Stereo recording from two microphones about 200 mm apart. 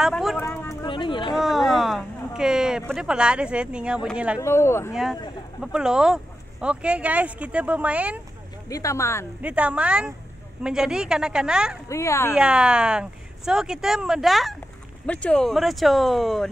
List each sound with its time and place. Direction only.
0.0 s a sound: centre (ahead or behind)
0.4 s a sound: 15° left (ahead or behind)
1.3 s a sound: centre (ahead or behind)
4.4 s speech: 15° left (ahead or behind)
5.6 s speech: 5° right (ahead or behind)
8.6 s speech: 15° left (ahead or behind)
9.4 s speech: 5° right (ahead or behind)
11.9 s speech: 15° left (ahead or behind)
12.4 s speech: 5° right (ahead or behind)